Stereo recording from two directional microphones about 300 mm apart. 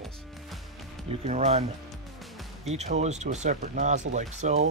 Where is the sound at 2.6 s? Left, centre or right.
Right.